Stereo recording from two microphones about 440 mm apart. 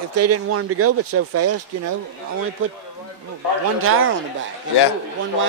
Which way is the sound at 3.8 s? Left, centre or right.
Right.